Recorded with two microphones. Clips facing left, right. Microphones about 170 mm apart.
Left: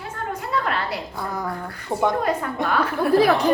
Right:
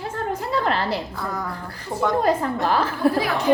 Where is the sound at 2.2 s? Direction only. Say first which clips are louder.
Right 3 dB; 30° right (ahead or behind).